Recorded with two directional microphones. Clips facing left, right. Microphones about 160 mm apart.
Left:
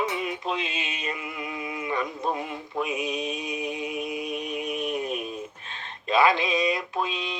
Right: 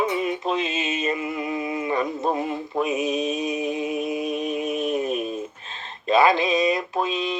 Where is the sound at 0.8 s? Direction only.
45° right (ahead or behind).